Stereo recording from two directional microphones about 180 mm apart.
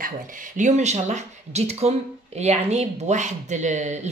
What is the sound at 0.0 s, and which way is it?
Speech, 45° right (ahead or behind).